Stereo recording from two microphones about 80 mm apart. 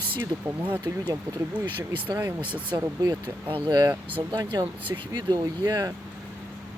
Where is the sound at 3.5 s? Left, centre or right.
Right.